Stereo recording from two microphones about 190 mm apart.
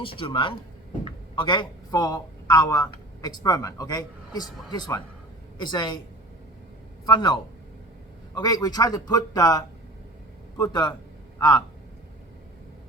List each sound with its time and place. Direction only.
0.0 s a man's voice: 25° left (ahead or behind)
7.0 s speech: 20° left (ahead or behind)
8.4 s a man's voice: 20° left (ahead or behind)